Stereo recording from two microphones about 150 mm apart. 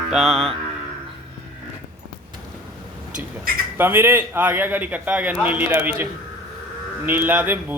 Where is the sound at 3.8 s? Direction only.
15° right (ahead or behind).